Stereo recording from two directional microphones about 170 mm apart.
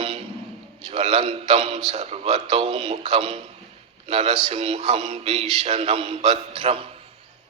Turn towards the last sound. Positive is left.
turn(degrees=-35)  # may be behind; listen again after turning